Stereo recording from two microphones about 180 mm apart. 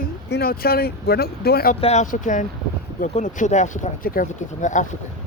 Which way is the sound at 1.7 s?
35° left (ahead or behind).